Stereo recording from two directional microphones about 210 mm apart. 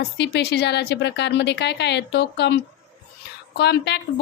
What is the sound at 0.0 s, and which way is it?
A woman's voice, 55° left (ahead or behind).